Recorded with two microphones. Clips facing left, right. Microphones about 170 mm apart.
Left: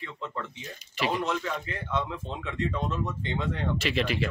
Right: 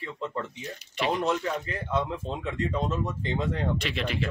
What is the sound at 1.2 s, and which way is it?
Speech, 35° right (ahead or behind).